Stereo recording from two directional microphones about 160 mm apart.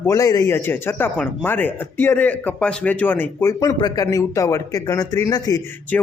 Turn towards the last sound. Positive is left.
turn(degrees=5)  # may be behind; listen again after turning